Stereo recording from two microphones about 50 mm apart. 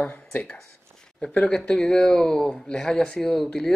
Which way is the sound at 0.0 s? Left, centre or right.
Left.